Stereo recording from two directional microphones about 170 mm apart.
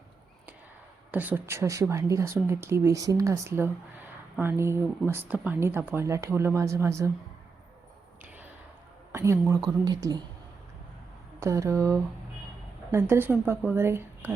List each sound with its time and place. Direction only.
1.1 s speech: 10° right (ahead or behind)
8.2 s a sound: 10° right (ahead or behind)
9.1 s speech: 15° right (ahead or behind)
11.3 s speech: 15° right (ahead or behind)